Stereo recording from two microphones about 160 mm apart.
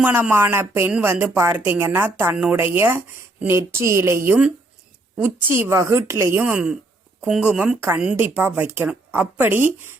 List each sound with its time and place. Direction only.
0.0 s a woman's voice: 10° right (ahead or behind)
4.3 s a woman's voice: 5° right (ahead or behind)